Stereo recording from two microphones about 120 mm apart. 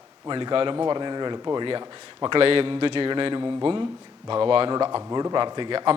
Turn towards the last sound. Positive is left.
turn(degrees=-40)  # may be behind; listen again after turning